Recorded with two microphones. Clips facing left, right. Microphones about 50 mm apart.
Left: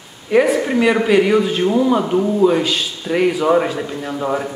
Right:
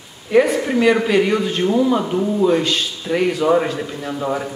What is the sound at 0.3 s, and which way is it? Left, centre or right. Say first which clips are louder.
A man's voice: left 1 dB; centre.